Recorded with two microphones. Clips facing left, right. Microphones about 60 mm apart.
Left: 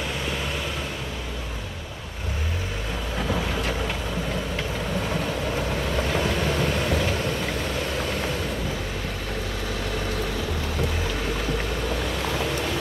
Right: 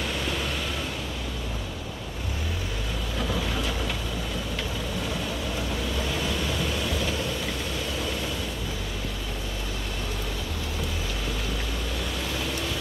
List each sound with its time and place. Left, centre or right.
5.9 s vehicle: left